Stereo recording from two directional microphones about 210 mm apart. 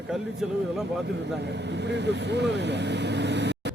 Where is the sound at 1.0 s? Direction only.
55° right (ahead or behind).